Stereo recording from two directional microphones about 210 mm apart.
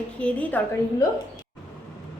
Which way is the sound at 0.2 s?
5° left (ahead or behind).